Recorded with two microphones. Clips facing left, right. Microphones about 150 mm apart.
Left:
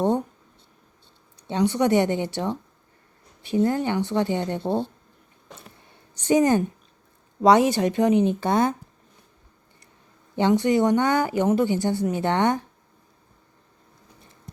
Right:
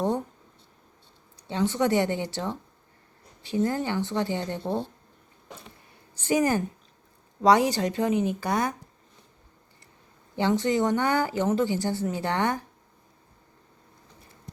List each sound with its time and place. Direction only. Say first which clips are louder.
1.4 s speech: left 3 dB; 20° left (ahead or behind)
6.2 s speech: left 5 dB; 25° left (ahead or behind)
10.3 s speech: left 4 dB; 20° left (ahead or behind)